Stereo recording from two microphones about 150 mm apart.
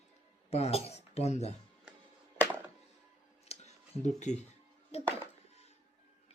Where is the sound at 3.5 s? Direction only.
50° left (ahead or behind).